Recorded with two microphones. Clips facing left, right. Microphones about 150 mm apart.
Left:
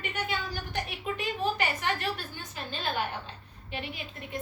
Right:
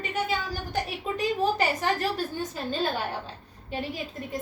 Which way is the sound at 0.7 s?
40° right (ahead or behind).